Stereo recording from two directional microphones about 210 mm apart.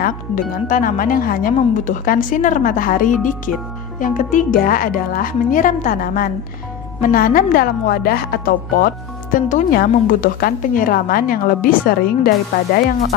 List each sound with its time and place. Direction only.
0.0 s a woman's voice: 40° left (ahead or behind)